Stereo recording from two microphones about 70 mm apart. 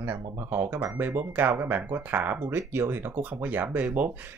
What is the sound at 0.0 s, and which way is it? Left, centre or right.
Speech, right.